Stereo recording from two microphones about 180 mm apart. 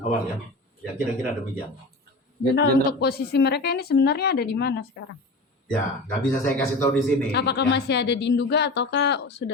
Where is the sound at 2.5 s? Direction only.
65° left (ahead or behind).